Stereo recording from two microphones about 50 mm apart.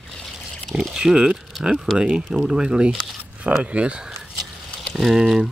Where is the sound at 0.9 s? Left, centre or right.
Centre.